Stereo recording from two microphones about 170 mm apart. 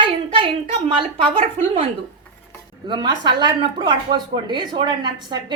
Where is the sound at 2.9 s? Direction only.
25° right (ahead or behind).